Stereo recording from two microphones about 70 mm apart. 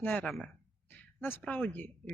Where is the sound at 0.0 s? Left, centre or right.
Centre.